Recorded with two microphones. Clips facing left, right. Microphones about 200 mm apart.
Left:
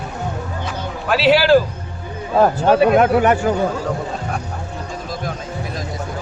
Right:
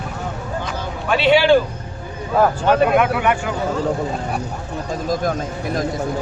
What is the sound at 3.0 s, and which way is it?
Speech, 40° left (ahead or behind).